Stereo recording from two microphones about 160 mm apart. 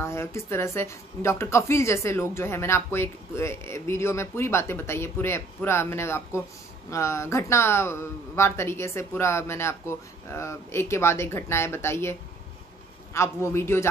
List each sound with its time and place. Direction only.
0.0 s a woman's voice: 15° left (ahead or behind)